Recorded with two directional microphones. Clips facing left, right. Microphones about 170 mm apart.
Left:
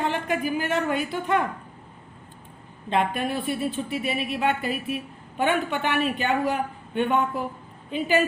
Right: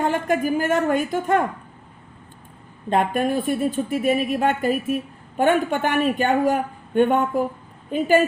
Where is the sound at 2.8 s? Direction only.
45° right (ahead or behind).